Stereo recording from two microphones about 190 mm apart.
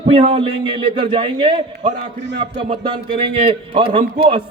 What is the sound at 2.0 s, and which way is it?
Speech, 65° right (ahead or behind).